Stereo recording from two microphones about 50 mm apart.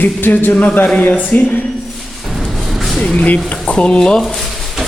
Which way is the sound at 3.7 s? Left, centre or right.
Left.